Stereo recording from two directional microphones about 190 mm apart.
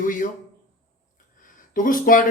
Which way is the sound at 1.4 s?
45° left (ahead or behind).